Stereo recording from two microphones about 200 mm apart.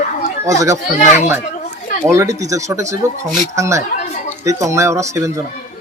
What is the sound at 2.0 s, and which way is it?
Speech, 15° right (ahead or behind).